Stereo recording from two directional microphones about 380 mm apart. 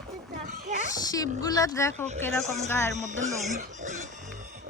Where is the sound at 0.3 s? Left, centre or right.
Centre.